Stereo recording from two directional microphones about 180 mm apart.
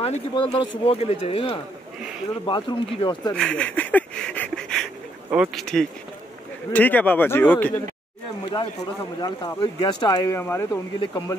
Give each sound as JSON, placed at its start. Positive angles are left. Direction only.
{"t": 0.0, "sound": "speech", "side_deg": 30}
{"t": 3.3, "sound": "a sound", "side_deg": 5}
{"t": 5.3, "sound": "speech", "side_deg": 0}
{"t": 9.2, "sound": "speech", "side_deg": 25}